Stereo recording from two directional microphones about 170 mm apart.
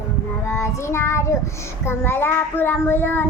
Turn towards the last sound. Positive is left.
turn(degrees=15)  # may be behind; listen again after turning